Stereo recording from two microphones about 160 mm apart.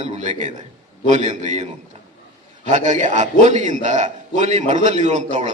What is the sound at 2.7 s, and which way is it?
A man's voice, 50° right (ahead or behind).